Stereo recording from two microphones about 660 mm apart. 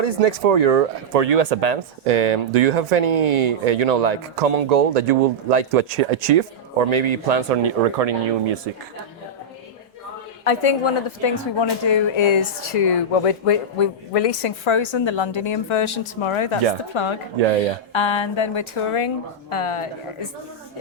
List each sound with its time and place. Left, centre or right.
0.0 s speech: right
10.4 s a woman's voice: left